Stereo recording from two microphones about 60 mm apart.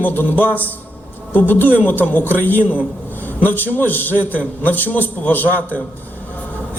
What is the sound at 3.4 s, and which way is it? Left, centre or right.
A man's voice, left.